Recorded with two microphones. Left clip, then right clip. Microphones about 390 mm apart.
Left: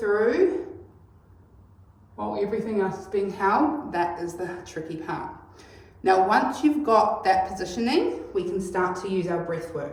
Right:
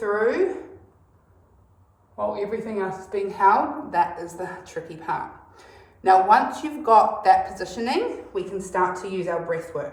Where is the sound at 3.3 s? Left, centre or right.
Centre.